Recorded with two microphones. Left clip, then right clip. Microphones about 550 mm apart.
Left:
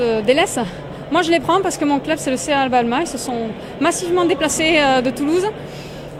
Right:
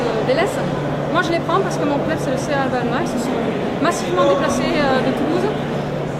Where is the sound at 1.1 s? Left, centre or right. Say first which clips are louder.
Left 3 dB; left.